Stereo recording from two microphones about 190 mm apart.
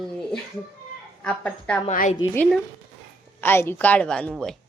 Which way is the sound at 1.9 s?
45° left (ahead or behind).